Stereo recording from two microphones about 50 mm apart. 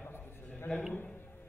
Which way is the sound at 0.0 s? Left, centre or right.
Left.